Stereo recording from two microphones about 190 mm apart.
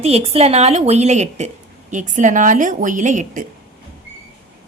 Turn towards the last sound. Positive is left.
turn(degrees=-40)  # may be behind; listen again after turning